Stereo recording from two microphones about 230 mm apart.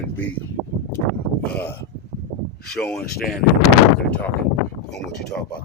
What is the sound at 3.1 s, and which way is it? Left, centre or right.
Speech, left.